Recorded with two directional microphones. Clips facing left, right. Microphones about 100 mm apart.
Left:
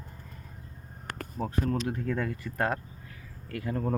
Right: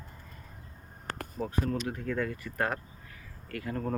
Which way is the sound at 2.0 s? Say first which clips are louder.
Left 1 dB; 25° left (ahead or behind).